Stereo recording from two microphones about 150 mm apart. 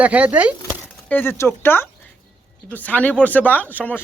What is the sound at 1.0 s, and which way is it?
Speech, 15° left (ahead or behind).